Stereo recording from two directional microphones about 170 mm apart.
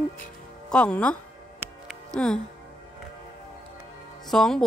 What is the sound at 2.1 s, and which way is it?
Speech, 5° left (ahead or behind).